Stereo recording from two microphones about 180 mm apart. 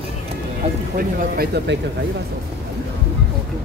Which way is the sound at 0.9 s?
55° right (ahead or behind).